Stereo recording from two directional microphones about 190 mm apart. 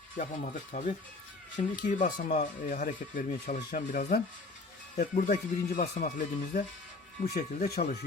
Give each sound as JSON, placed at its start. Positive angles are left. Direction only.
{"t": 0.2, "sound": "speech", "side_deg": 40}
{"t": 7.3, "sound": "speech", "side_deg": 55}